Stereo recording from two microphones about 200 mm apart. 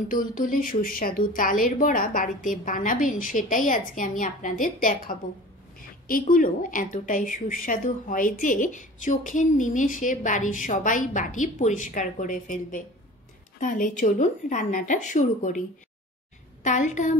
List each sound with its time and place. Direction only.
0.1 s a woman's voice: 45° left (ahead or behind)
16.6 s a woman's voice: 35° left (ahead or behind)